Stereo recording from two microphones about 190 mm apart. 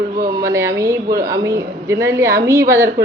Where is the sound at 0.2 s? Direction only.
15° right (ahead or behind).